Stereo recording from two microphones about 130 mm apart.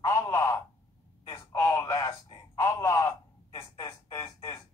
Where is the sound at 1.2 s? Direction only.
25° left (ahead or behind).